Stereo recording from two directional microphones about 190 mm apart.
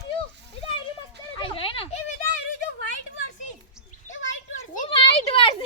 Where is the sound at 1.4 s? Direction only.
30° left (ahead or behind).